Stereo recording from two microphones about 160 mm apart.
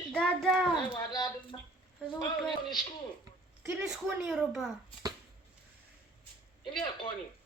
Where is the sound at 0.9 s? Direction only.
25° left (ahead or behind).